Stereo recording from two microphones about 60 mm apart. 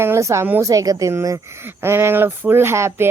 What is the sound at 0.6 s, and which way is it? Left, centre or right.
Speech, right.